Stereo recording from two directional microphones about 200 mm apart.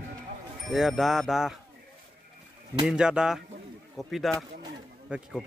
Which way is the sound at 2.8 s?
5° right (ahead or behind).